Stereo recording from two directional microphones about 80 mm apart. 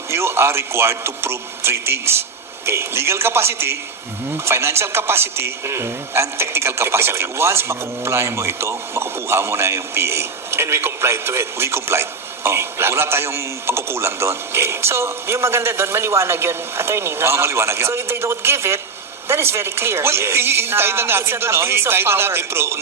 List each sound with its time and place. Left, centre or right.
0.1 s a man's voice: right